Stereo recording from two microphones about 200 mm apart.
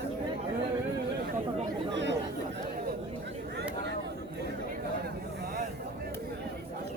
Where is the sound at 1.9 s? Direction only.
60° right (ahead or behind).